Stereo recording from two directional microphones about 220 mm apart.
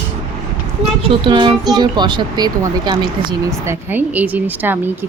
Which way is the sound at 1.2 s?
20° right (ahead or behind).